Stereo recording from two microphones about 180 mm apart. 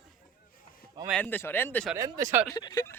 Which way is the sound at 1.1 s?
10° left (ahead or behind).